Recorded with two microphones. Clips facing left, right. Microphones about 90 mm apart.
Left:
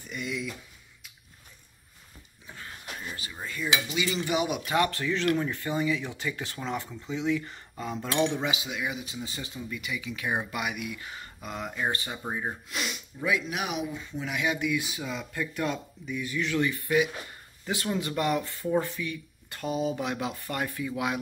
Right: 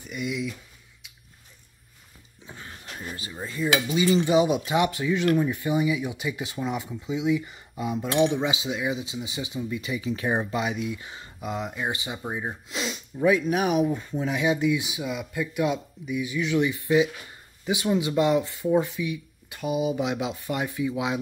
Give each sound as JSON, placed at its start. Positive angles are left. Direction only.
{"t": 0.0, "sound": "speech", "side_deg": -5}
{"t": 2.4, "sound": "a sound", "side_deg": -25}
{"t": 3.4, "sound": "speech", "side_deg": -30}
{"t": 9.8, "sound": "speech", "side_deg": -30}
{"t": 12.6, "sound": "snort", "side_deg": -25}
{"t": 13.4, "sound": "speech", "side_deg": -40}